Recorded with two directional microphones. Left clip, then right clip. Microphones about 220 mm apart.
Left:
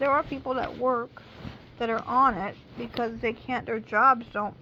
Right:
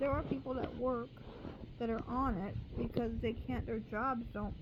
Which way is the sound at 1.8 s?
15° right (ahead or behind).